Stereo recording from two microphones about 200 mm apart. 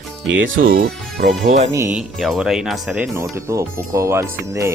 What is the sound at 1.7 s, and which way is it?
Speech, 10° right (ahead or behind).